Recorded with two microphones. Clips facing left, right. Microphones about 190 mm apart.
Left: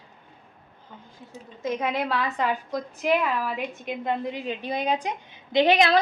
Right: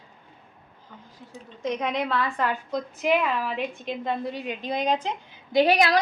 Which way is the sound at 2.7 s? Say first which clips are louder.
Even; 5° left (ahead or behind).